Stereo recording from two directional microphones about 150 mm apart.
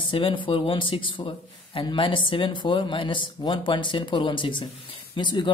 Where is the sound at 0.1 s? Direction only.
35° left (ahead or behind).